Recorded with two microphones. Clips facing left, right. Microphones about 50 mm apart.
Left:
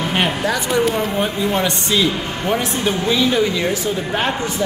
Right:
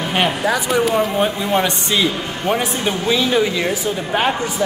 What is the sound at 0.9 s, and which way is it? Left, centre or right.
A man's voice, centre.